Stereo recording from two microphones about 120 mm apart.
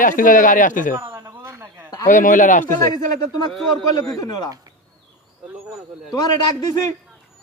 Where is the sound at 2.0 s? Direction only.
90° left.